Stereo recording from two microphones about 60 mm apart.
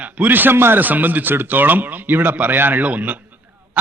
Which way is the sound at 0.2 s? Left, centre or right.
Right.